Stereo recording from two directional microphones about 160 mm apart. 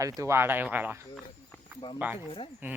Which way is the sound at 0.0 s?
20° right (ahead or behind).